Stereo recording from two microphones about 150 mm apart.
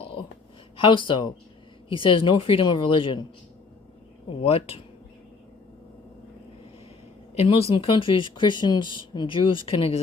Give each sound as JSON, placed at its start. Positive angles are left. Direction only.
{"t": 0.8, "sound": "speech", "side_deg": 35}
{"t": 4.3, "sound": "speech", "side_deg": 40}
{"t": 7.3, "sound": "speech", "side_deg": 40}